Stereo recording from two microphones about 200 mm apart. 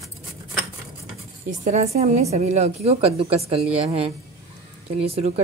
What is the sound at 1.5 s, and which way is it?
A woman's voice, 35° right (ahead or behind).